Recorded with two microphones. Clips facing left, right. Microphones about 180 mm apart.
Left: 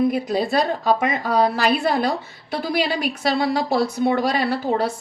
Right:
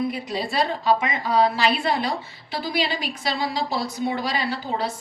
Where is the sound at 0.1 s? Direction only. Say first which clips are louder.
Left 7 dB; 50° left (ahead or behind).